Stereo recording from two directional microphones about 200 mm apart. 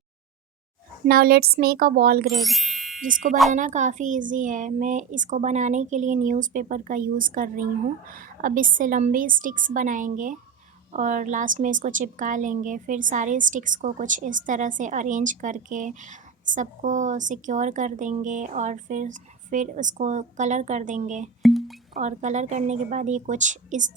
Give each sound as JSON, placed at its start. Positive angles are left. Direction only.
{"t": 1.0, "sound": "speech", "side_deg": -50}
{"t": 2.3, "sound": "speech", "side_deg": 0}
{"t": 3.0, "sound": "a woman's voice", "side_deg": -40}
{"t": 21.4, "sound": "a sound", "side_deg": 0}
{"t": 21.9, "sound": "a woman's voice", "side_deg": -35}